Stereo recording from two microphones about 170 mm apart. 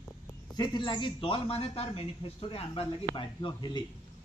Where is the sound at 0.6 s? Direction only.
25° left (ahead or behind).